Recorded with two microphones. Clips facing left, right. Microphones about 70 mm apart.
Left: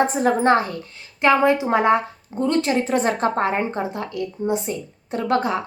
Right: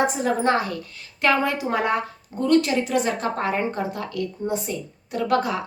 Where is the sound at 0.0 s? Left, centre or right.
Left.